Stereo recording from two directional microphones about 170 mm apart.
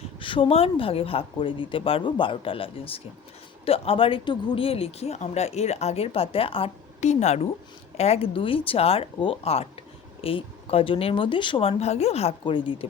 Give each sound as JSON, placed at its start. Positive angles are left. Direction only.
{"t": 0.2, "sound": "speech", "side_deg": 30}